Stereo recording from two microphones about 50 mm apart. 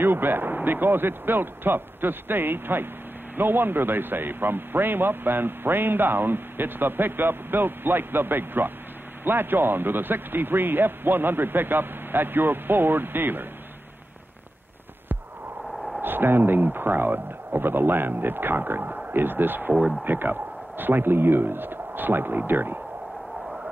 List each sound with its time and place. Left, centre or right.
0.0 s a man's voice: right
16.0 s a man's voice: right